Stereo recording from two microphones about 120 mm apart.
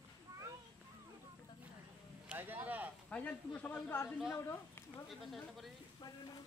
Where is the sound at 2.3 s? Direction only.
15° right (ahead or behind).